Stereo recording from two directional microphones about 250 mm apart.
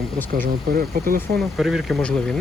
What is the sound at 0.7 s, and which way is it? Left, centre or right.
Speech, right.